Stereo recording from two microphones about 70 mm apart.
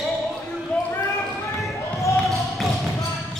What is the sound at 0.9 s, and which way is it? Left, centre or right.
Basketball bounce, left.